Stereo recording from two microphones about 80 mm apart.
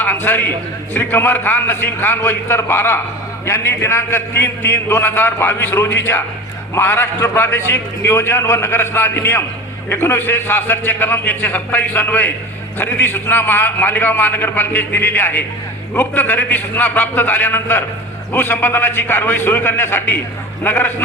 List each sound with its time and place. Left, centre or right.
0.0 s a man's voice: left